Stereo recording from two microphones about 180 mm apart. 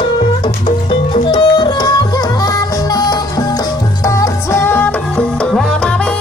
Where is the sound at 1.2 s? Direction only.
25° left (ahead or behind); by 5.6 s 10° left (ahead or behind).